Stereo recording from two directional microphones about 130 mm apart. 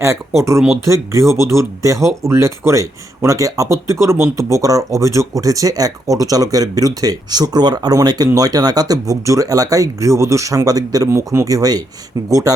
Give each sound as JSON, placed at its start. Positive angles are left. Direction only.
{"t": 0.0, "sound": "speech", "side_deg": -20}